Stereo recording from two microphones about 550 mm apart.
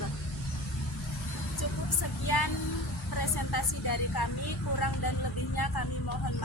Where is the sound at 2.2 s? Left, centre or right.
Left.